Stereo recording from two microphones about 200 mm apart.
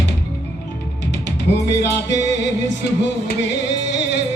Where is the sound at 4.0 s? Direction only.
60° left (ahead or behind).